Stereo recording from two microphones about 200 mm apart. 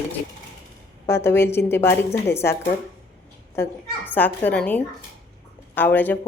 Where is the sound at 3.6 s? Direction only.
15° left (ahead or behind).